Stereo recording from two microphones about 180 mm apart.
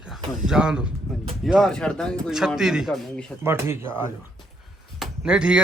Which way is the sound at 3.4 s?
15° right (ahead or behind).